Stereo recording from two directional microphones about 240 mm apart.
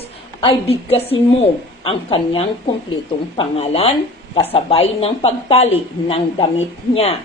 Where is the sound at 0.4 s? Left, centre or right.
Left.